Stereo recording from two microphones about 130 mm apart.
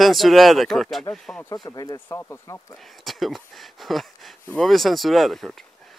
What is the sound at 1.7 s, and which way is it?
Speech, 30° left (ahead or behind).